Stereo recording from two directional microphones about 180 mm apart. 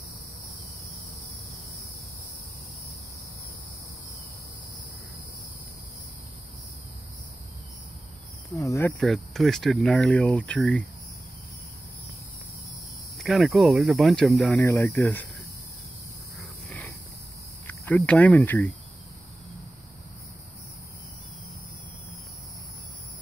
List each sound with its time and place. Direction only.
8.5 s speech: 15° left (ahead or behind)
9.0 s speech: centre (ahead or behind)
13.2 s speech: centre (ahead or behind)
14.5 s speech: 15° left (ahead or behind)
16.3 s a sound: 5° left (ahead or behind)
17.6 s speech: 10° left (ahead or behind)